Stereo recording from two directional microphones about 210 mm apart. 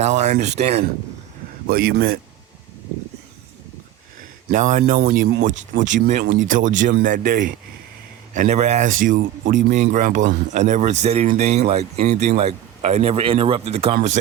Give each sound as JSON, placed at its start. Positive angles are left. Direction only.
{"t": 0.0, "sound": "speech", "side_deg": -30}
{"t": 1.6, "sound": "speech", "side_deg": -45}
{"t": 4.4, "sound": "speech", "side_deg": -35}